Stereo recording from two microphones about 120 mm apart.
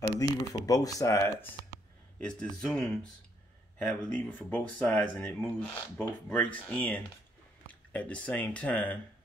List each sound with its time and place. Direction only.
0.2 s speech: 25° left (ahead or behind)
2.1 s speech: 10° left (ahead or behind)